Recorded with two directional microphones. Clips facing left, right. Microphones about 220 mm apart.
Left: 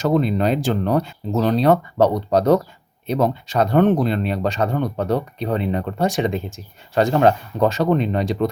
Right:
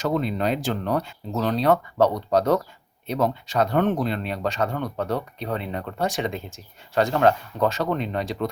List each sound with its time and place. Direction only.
0.0 s speech: 30° left (ahead or behind)